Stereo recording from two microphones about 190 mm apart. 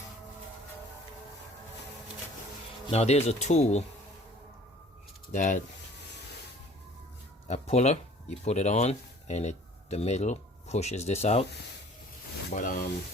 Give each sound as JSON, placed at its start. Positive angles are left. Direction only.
{"t": 2.8, "sound": "speech", "side_deg": 35}
{"t": 5.3, "sound": "speech", "side_deg": 40}
{"t": 7.4, "sound": "speech", "side_deg": 35}
{"t": 12.5, "sound": "speech", "side_deg": 45}